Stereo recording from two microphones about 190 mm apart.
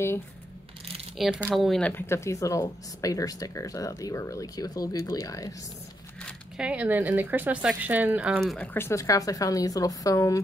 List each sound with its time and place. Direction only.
1.1 s speech: centre (ahead or behind); by 5.5 s 15° left (ahead or behind)
6.2 s speech: 5° right (ahead or behind)
8.7 s speech: 15° left (ahead or behind)